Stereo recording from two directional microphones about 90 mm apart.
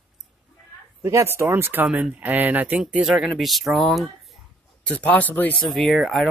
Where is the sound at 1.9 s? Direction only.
10° right (ahead or behind).